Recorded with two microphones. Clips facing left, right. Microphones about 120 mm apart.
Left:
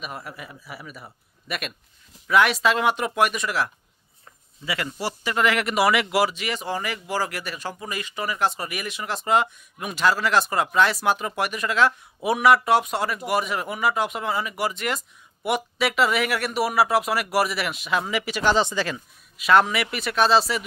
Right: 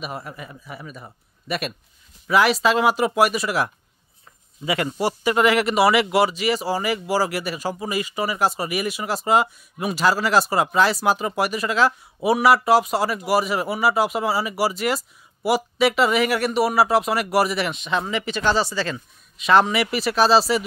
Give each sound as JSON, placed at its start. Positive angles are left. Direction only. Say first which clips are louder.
{"t": 0.0, "sound": "speech", "louder": "right 3 dB", "side_deg": -5}
{"t": 4.6, "sound": "speech", "louder": "right 6 dB", "side_deg": -20}
{"t": 18.9, "sound": "speech", "louder": "right 3 dB", "side_deg": 0}